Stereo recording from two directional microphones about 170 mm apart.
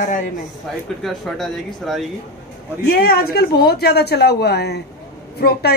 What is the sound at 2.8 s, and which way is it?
A woman's voice, 65° left (ahead or behind).